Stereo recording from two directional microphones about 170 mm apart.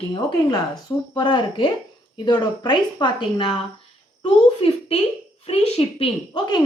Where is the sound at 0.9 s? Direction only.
25° left (ahead or behind).